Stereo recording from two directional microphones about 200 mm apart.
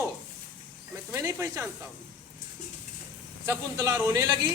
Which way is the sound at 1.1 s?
15° right (ahead or behind).